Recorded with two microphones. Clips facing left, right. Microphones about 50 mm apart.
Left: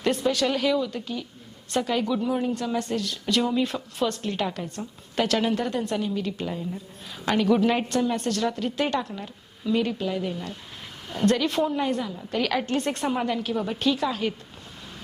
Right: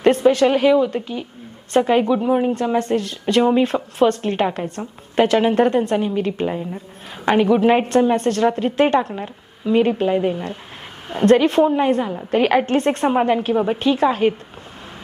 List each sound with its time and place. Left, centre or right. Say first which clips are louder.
0.0 s a woman's voice: right 10 dB; right